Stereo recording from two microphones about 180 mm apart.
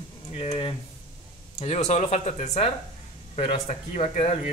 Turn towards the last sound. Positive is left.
turn(degrees=35)  # may be behind; listen again after turning